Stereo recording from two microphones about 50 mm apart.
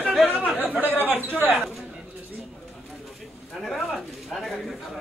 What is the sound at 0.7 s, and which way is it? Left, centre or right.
Speech, right.